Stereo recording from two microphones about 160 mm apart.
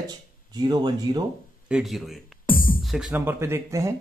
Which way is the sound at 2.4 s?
60° left (ahead or behind).